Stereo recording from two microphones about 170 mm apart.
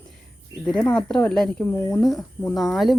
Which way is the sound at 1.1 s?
5° left (ahead or behind).